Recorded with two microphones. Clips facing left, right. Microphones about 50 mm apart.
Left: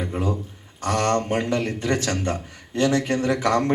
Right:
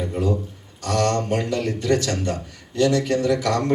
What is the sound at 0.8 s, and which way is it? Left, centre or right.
A man's voice, left.